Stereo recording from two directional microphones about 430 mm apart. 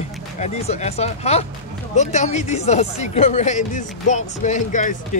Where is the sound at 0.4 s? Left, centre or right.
Centre.